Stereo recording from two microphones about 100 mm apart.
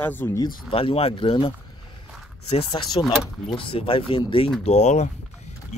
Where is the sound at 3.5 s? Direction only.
65° left (ahead or behind).